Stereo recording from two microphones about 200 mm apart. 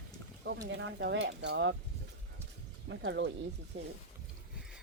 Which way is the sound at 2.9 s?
65° right (ahead or behind).